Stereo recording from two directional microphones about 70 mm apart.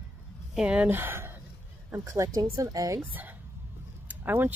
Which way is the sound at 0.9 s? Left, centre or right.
Right.